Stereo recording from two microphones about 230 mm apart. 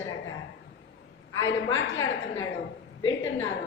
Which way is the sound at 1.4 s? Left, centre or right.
Left.